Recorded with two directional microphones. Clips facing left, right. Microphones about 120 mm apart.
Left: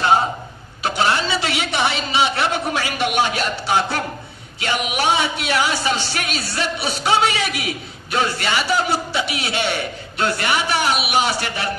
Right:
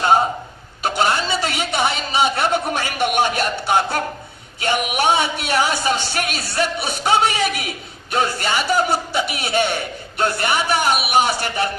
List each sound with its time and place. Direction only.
1.0 s a man's voice: 45° right (ahead or behind)